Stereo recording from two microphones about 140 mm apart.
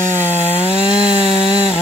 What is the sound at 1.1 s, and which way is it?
Chainsaw, 40° left (ahead or behind).